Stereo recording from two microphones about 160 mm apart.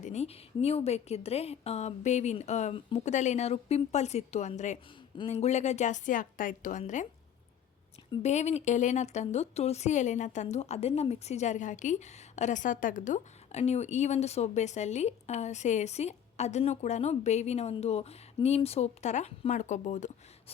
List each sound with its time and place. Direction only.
0.0 s a woman's voice: 45° left (ahead or behind)
8.2 s a woman's voice: 45° left (ahead or behind)